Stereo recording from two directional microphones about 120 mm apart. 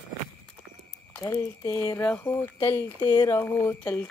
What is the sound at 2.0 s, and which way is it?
Speech, 15° left (ahead or behind).